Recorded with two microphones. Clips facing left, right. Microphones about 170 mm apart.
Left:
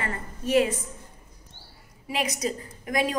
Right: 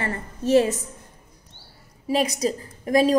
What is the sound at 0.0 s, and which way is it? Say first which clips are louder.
Speech: right 5 dB; 30° right (ahead or behind).